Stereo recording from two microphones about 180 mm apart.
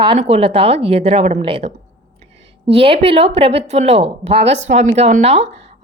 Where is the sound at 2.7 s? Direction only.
30° right (ahead or behind).